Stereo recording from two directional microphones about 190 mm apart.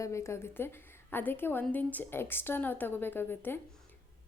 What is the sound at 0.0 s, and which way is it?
A woman's voice, 15° left (ahead or behind).